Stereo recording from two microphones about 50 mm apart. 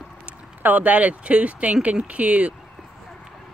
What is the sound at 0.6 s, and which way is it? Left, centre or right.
Speech, right.